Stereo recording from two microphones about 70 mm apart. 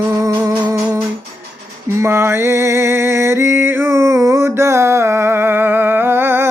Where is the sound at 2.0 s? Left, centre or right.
Right.